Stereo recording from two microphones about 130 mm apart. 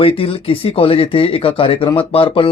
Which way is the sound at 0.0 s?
45° left (ahead or behind).